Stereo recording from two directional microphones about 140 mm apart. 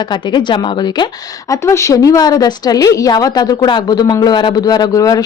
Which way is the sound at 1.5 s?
20° left (ahead or behind).